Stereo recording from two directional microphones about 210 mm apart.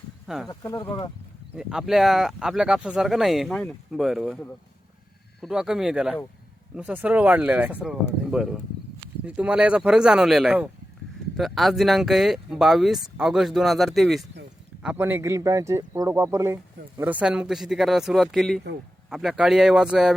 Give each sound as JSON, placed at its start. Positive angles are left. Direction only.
{"t": 0.4, "sound": "speech", "side_deg": 15}
{"t": 1.5, "sound": "speech", "side_deg": -5}
{"t": 5.4, "sound": "speech", "side_deg": 0}